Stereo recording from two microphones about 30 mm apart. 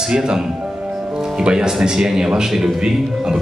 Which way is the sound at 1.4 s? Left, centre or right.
Right.